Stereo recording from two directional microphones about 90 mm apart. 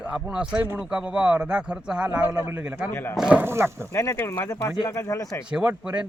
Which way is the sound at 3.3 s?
25° right (ahead or behind).